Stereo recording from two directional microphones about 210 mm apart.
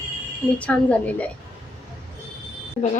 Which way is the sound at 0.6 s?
5° left (ahead or behind).